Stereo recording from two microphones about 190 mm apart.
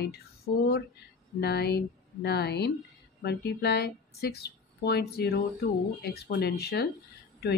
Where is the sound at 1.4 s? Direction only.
60° left (ahead or behind).